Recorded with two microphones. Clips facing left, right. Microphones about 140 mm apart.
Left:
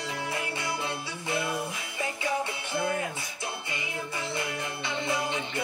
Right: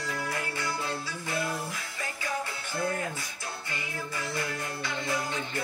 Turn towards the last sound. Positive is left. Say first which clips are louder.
# left 2 dB
turn(degrees=25)  # may be behind; listen again after turning